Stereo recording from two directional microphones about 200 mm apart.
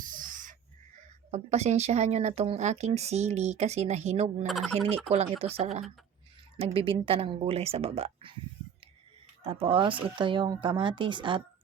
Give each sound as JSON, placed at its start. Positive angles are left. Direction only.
{"t": 0.0, "sound": "a sound", "side_deg": -40}
{"t": 1.3, "sound": "speech", "side_deg": -35}
{"t": 4.4, "sound": "speech", "side_deg": 0}
{"t": 5.0, "sound": "speech", "side_deg": -30}
{"t": 9.4, "sound": "speech", "side_deg": -25}